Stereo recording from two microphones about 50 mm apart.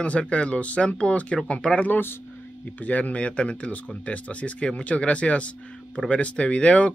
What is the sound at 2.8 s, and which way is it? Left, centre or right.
Speech, left.